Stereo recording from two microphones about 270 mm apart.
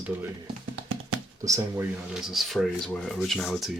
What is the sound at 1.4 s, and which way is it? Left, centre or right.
Speech, centre.